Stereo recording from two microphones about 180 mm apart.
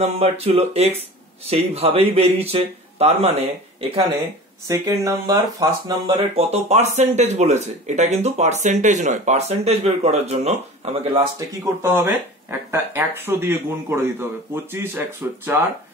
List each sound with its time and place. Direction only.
0.0 s speech: 35° right (ahead or behind)
4.6 s speech: 20° right (ahead or behind)
6.1 s speech: 35° right (ahead or behind)
11.3 s speech: 15° right (ahead or behind)